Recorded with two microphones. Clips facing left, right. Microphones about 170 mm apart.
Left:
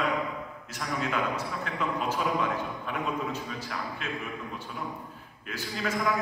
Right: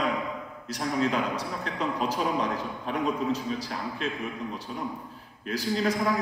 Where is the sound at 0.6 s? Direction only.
35° right (ahead or behind).